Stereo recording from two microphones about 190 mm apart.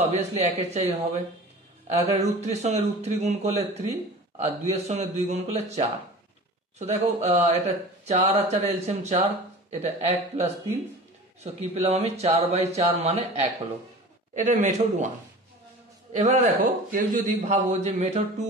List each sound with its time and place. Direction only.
0.0 s speech: 35° right (ahead or behind)
11.7 s speech: 35° right (ahead or behind)
16.1 s speech: 40° right (ahead or behind)